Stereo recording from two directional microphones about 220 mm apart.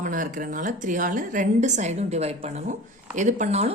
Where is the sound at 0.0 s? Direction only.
35° right (ahead or behind).